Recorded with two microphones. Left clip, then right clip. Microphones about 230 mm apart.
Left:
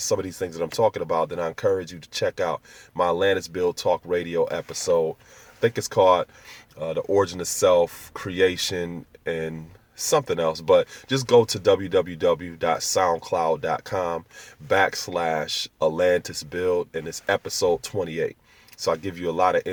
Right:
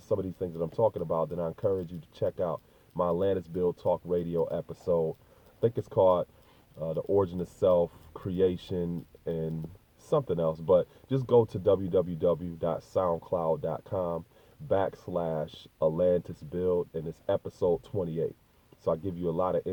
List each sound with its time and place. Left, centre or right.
0.1 s speech: left